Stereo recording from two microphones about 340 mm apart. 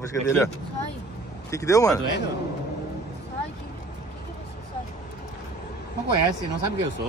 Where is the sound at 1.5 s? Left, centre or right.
Centre.